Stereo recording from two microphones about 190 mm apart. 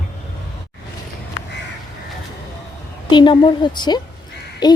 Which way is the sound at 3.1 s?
25° left (ahead or behind).